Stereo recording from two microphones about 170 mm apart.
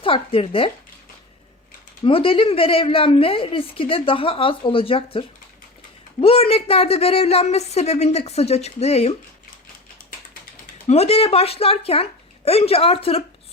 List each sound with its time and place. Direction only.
0.0 s a woman's voice: 30° left (ahead or behind)
2.0 s a woman's voice: 30° left (ahead or behind)
10.8 s a woman's voice: 35° left (ahead or behind)